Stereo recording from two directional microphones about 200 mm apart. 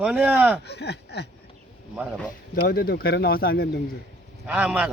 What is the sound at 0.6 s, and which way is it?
Speech, 55° left (ahead or behind).